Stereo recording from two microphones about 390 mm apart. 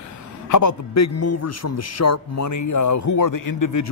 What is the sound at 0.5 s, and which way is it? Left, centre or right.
A man's voice, left.